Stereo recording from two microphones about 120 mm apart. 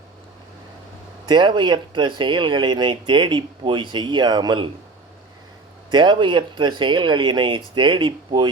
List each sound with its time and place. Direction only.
1.3 s speech: 40° right (ahead or behind)
5.9 s speech: 40° right (ahead or behind)